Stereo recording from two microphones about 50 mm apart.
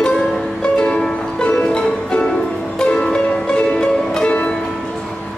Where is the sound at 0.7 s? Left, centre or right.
Centre.